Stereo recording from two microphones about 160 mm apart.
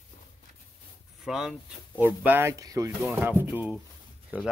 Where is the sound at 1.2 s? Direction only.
5° right (ahead or behind).